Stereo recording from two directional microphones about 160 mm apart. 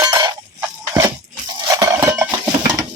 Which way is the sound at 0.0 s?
25° right (ahead or behind).